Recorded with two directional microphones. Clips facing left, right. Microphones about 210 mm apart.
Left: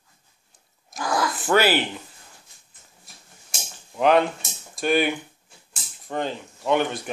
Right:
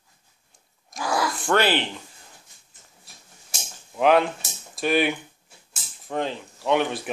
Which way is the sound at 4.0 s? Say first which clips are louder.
Even; centre (ahead or behind).